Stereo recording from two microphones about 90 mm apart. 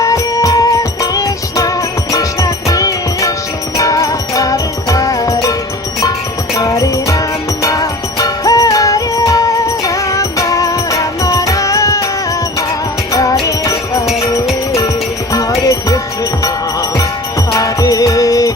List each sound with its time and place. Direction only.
0.0 s music: 40° left (ahead or behind)
13.4 s music: 35° left (ahead or behind)
15.3 s music: 40° left (ahead or behind)
17.5 s music: 40° left (ahead or behind)